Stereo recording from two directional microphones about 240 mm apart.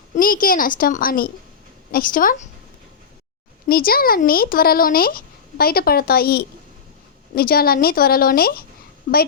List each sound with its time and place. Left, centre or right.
0.1 s a woman's voice: left
3.7 s speech: left